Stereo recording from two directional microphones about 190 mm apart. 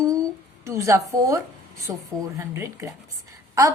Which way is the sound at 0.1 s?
15° right (ahead or behind).